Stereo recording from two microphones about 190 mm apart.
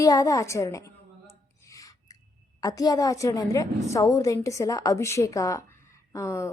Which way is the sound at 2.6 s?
20° left (ahead or behind).